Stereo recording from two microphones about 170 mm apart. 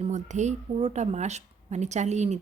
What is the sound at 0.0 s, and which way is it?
A woman's voice, 45° right (ahead or behind).